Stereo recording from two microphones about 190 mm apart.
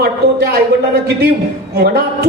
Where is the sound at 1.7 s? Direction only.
55° right (ahead or behind).